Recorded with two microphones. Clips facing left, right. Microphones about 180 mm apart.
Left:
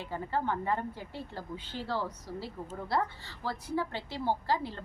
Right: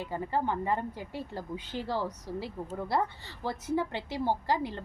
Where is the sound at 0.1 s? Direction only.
15° right (ahead or behind).